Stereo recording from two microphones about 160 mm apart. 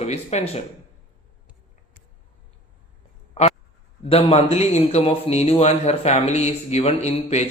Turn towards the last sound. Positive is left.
turn(degrees=45)  # may be behind; listen again after turning